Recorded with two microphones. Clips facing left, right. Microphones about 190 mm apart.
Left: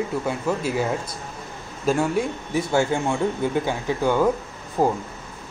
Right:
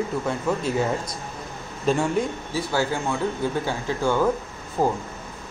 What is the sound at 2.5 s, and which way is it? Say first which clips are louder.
A man's voice: left 4 dB; 25° left (ahead or behind).